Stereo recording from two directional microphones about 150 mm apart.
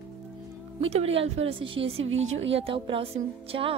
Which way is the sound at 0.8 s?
40° right (ahead or behind).